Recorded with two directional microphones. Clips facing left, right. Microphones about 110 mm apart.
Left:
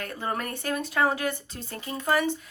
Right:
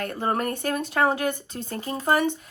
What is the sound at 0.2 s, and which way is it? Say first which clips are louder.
Speech: right 6 dB; 40° right (ahead or behind).